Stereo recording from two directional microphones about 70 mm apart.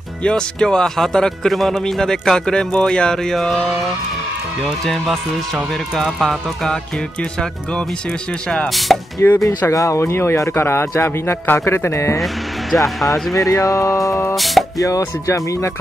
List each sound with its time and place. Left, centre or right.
0.2 s speech: centre
4.6 s speech: centre
8.5 s speech: centre
9.2 s speech: left
13.3 s speech: left
14.3 s music: centre
14.8 s speech: left